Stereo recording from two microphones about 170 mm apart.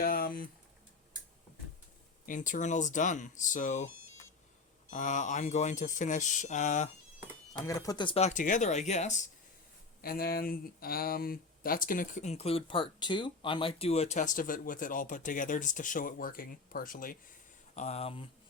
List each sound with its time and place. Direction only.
0.0 s a sound: 60° left (ahead or behind)
2.2 s speech: 50° left (ahead or behind)
4.9 s speech: 50° left (ahead or behind)
7.7 s speech: 20° left (ahead or behind); by 9.2 s 45° left (ahead or behind)
10.0 s speech: 60° left (ahead or behind)
17.7 s speech: 40° left (ahead or behind)